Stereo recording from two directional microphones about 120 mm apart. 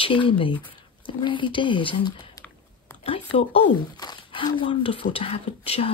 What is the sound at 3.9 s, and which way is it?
Speech, 35° left (ahead or behind).